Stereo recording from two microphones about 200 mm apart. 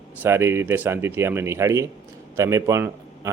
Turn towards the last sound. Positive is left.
turn(degrees=-15)  # may be behind; listen again after turning